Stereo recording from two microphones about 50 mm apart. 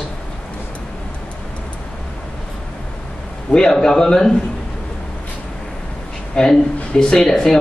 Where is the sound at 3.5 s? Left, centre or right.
Centre.